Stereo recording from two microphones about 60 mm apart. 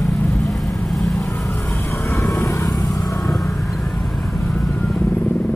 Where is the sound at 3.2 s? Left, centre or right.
Left.